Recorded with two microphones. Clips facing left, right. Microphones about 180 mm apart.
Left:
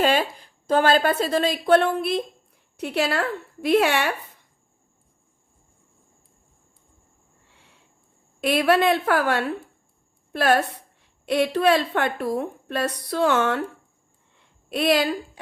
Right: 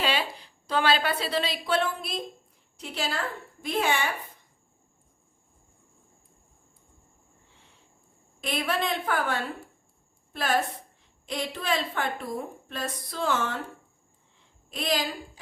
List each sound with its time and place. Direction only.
0.0 s a woman's voice: 50° left (ahead or behind); by 4.1 s 70° left (ahead or behind)
8.4 s a woman's voice: 70° left (ahead or behind)
14.3 s a sound: 65° left (ahead or behind)